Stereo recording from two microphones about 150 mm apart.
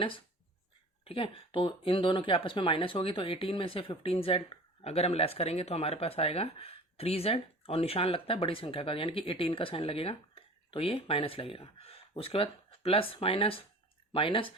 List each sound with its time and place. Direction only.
1.0 s speech: 35° left (ahead or behind)